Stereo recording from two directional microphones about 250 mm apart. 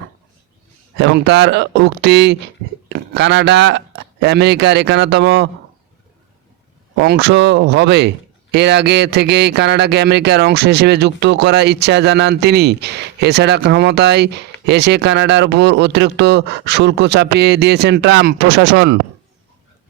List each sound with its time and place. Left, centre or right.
0.9 s speech: right
6.9 s speech: right